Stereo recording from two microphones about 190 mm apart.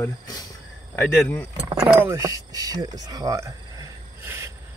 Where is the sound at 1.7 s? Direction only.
10° right (ahead or behind).